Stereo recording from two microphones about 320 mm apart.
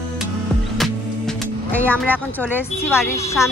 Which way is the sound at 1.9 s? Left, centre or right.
Centre.